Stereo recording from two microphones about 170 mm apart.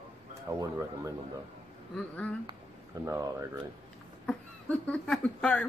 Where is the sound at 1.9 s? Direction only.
5° left (ahead or behind).